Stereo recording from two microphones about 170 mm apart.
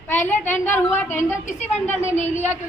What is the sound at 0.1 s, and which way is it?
A woman's voice, 10° left (ahead or behind).